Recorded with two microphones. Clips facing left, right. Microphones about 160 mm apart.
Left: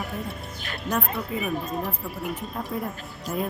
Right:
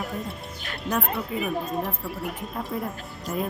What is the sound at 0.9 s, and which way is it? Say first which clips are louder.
Speech: right 1 dB; centre (ahead or behind).